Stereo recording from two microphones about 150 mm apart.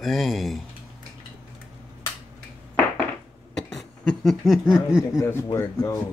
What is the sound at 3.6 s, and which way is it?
Cough, 5° left (ahead or behind).